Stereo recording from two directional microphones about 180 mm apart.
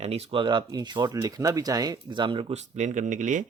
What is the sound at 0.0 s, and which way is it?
Speech, 35° right (ahead or behind).